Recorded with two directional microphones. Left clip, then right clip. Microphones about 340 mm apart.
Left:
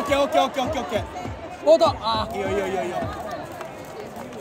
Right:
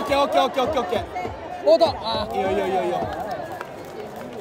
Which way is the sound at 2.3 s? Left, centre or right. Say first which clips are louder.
Right 3 dB; centre.